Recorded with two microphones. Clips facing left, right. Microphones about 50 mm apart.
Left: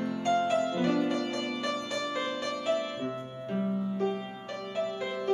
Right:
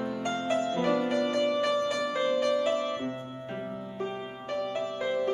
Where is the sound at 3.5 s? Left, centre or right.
Centre.